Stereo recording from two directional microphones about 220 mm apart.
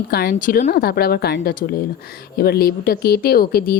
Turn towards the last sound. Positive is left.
turn(degrees=40)  # may be behind; listen again after turning